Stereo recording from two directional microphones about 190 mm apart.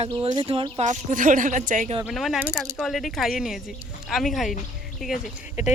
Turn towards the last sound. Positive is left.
turn(degrees=-5)  # may be behind; listen again after turning